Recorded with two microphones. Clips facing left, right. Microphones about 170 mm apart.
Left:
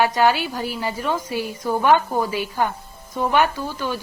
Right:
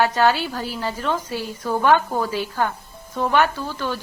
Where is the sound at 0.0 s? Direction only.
15° left (ahead or behind).